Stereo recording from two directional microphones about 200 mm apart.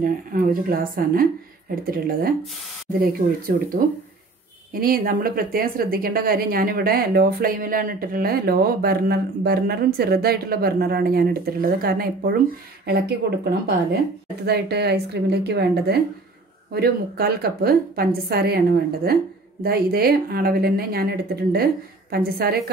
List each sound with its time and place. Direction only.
0.0 s a woman's voice: 45° right (ahead or behind)